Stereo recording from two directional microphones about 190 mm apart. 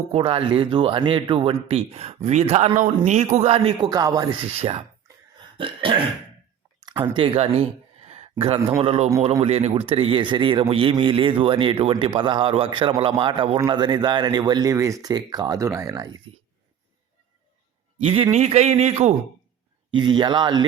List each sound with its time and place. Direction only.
0.1 s speech: 30° right (ahead or behind)
6.8 s a sound: 25° right (ahead or behind)
8.8 s a man's voice: 30° right (ahead or behind)
18.0 s a man's voice: 30° right (ahead or behind)
19.9 s speech: 25° right (ahead or behind)